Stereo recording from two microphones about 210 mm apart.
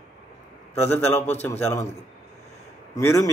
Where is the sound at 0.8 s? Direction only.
10° left (ahead or behind).